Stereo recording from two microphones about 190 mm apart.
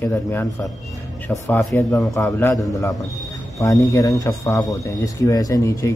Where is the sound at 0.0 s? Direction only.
10° left (ahead or behind).